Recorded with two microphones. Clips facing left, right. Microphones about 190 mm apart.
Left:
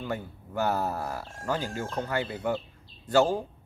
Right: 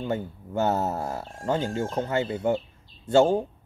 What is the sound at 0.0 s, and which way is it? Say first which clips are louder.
Speech: right 5 dB; 25° right (ahead or behind).